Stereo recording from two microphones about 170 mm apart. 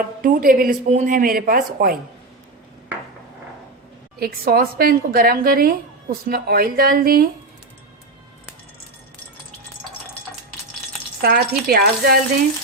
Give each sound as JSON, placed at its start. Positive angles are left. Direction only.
{"t": 0.0, "sound": "a woman's voice", "side_deg": -55}
{"t": 4.2, "sound": "a woman's voice", "side_deg": -60}
{"t": 11.2, "sound": "a woman's voice", "side_deg": -60}